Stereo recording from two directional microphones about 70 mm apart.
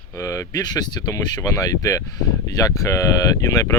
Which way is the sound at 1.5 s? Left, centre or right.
Left.